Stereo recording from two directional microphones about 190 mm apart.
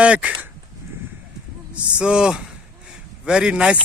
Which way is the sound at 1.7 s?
5° right (ahead or behind).